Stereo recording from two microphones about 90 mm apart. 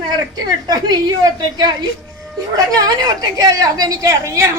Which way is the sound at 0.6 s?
45° right (ahead or behind).